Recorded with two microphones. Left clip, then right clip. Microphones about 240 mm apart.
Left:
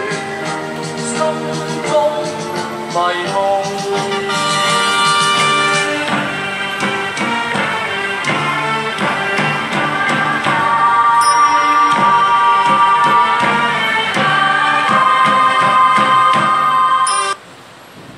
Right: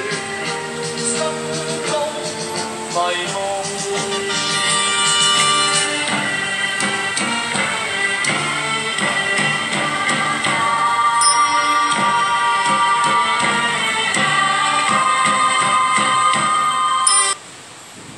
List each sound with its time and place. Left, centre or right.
3.9 s music: left; by 6.2 s centre
9.0 s music: centre